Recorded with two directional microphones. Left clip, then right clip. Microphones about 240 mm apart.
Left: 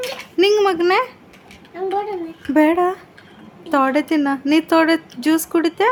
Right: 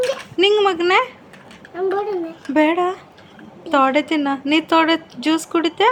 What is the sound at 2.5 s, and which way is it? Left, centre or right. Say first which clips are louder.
A woman's voice: left 1 dB; centre.